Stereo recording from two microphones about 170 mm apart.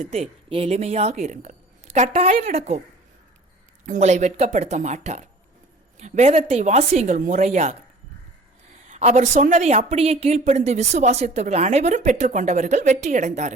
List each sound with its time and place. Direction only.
0.0 s speech: 35° right (ahead or behind)
3.8 s speech: 45° right (ahead or behind)
8.9 s speech: 40° right (ahead or behind)